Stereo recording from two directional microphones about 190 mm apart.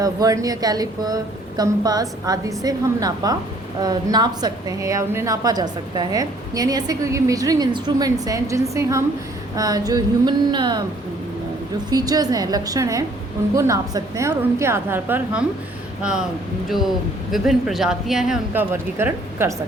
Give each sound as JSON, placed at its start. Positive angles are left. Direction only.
{"t": 0.0, "sound": "a woman's voice", "side_deg": -20}
{"t": 11.9, "sound": "a woman's voice", "side_deg": -20}
{"t": 18.7, "sound": "a woman's voice", "side_deg": -10}